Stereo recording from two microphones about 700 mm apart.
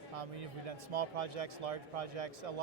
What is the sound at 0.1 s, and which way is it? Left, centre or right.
Speech, right.